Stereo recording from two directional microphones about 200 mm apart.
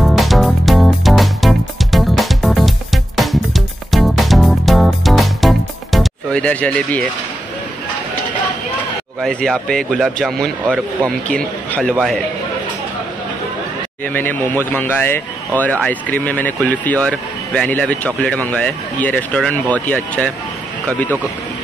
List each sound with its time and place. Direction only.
0.0 s music: centre (ahead or behind)
9.2 s a man's voice: 5° left (ahead or behind)
14.0 s speech: 10° left (ahead or behind)